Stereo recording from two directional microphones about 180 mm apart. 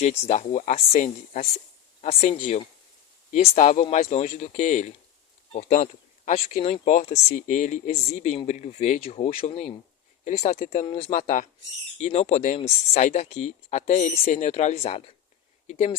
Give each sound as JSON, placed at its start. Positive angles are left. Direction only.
{"t": 0.0, "sound": "speech", "side_deg": 40}